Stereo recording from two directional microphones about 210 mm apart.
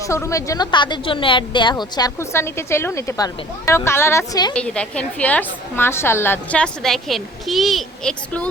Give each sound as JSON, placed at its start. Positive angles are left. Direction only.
{"t": 0.0, "sound": "a woman's voice", "side_deg": 15}
{"t": 4.5, "sound": "a woman's voice", "side_deg": 5}